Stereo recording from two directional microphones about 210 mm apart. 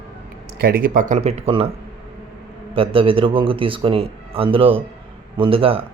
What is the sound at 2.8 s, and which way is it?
A man's voice, 25° right (ahead or behind).